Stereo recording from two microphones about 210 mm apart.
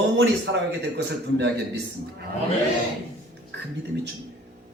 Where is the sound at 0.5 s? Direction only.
65° right (ahead or behind).